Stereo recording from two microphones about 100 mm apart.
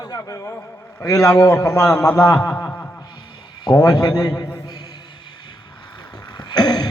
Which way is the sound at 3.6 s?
40° left (ahead or behind).